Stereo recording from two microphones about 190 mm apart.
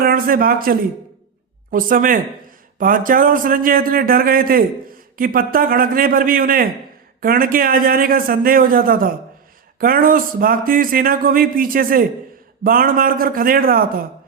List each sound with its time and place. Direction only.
0.0 s a man's voice: 50° right (ahead or behind)